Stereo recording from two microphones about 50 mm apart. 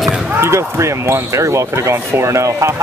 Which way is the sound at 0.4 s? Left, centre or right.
Right.